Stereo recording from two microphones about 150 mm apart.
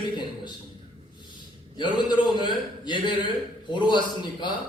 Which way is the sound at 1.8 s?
30° left (ahead or behind).